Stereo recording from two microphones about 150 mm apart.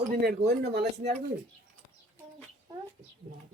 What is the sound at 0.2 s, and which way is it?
Speech, 90° right.